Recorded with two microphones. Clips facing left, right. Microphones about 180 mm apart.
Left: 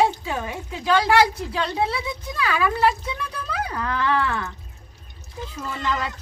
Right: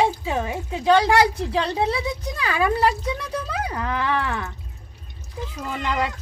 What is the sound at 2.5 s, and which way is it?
Speech, 20° right (ahead or behind).